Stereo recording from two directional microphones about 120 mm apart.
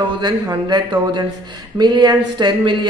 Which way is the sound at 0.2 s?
35° right (ahead or behind).